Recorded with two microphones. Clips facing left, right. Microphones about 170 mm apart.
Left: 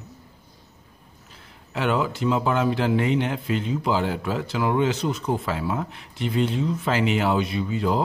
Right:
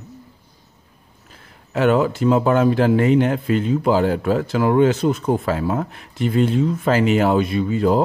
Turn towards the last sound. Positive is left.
turn(degrees=-50)  # may be behind; listen again after turning